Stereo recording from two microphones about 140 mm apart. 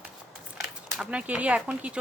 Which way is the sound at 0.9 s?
5° right (ahead or behind).